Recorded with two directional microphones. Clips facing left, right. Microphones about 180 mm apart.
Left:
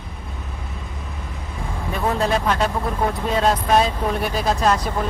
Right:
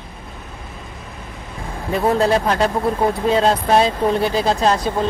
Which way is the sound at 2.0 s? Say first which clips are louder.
Right 4 dB; 35° right (ahead or behind).